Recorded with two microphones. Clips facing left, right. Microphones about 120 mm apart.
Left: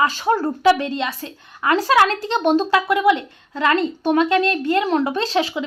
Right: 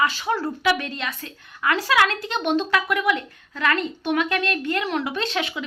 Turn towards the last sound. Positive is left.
turn(degrees=30)  # may be behind; listen again after turning